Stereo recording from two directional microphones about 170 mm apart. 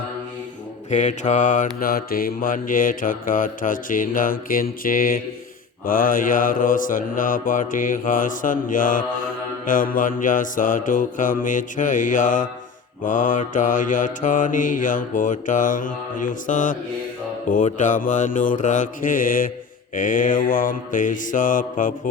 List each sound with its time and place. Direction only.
0.9 s mantra: 45° left (ahead or behind)